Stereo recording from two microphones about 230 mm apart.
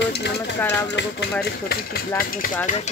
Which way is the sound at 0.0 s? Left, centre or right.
Left.